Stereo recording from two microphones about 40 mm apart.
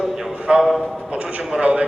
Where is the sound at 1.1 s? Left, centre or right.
Right.